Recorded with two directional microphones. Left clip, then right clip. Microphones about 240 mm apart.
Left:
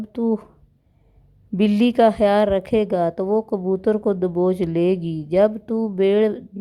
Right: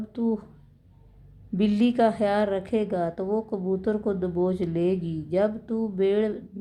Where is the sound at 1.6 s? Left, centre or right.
Left.